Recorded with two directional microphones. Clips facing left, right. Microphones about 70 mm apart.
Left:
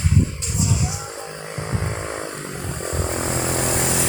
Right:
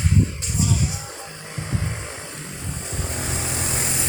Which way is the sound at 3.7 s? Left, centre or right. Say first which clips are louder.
Left 6 dB; left.